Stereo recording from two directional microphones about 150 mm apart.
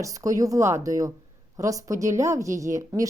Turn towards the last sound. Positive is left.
turn(degrees=-20)  # may be behind; listen again after turning